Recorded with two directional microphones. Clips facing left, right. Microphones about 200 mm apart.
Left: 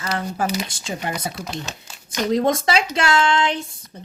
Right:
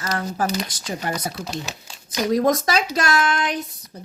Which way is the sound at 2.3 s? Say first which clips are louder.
Even; 25° left (ahead or behind).